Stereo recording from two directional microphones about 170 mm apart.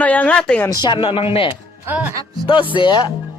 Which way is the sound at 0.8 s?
30° left (ahead or behind).